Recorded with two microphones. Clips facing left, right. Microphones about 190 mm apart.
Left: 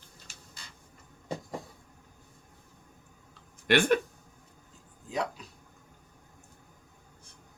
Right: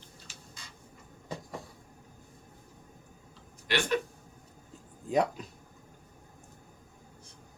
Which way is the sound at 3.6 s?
55° left (ahead or behind).